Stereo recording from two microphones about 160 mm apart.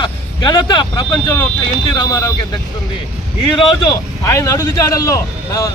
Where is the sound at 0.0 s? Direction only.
25° left (ahead or behind).